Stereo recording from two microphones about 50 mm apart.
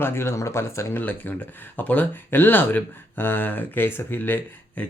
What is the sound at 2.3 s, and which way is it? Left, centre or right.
Speech, left.